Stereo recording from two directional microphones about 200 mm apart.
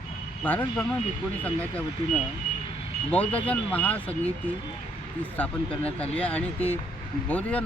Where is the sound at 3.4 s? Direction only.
5° left (ahead or behind).